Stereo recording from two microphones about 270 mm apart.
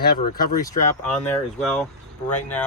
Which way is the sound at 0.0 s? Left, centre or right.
Left.